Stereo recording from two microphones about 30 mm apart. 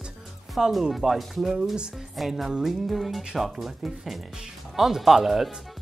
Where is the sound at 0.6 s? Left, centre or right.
Centre.